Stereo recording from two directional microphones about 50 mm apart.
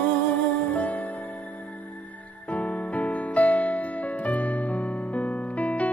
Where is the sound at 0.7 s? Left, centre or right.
Left.